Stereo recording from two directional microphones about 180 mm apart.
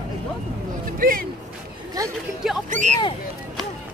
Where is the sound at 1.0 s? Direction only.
50° right (ahead or behind).